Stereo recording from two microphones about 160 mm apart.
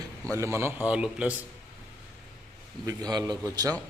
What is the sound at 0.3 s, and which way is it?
Speech, 20° right (ahead or behind).